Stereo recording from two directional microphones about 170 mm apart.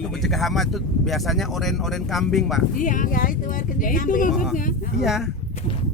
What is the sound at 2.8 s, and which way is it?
Speech, 50° left (ahead or behind).